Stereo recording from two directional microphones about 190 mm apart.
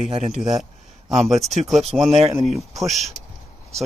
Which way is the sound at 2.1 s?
30° right (ahead or behind).